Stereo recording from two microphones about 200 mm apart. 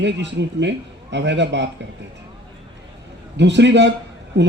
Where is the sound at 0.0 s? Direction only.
60° right (ahead or behind).